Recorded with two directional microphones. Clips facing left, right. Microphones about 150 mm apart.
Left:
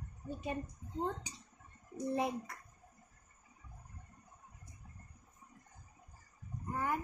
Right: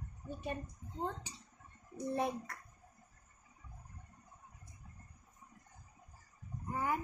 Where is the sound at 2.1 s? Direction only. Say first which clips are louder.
Even; 10° left (ahead or behind).